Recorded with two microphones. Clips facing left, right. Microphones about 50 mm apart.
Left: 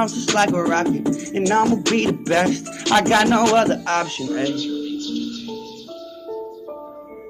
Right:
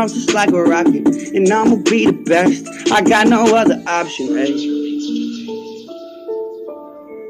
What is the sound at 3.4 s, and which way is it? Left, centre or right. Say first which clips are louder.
Speech: right 5 dB; right.